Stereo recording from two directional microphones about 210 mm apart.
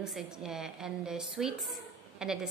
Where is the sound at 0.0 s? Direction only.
5° right (ahead or behind).